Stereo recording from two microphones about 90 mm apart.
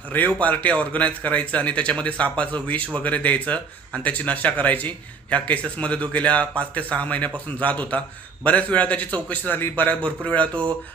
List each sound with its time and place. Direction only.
0.3 s speech: 15° left (ahead or behind)